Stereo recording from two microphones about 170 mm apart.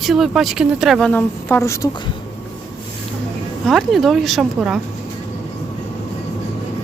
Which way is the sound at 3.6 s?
Centre (ahead or behind).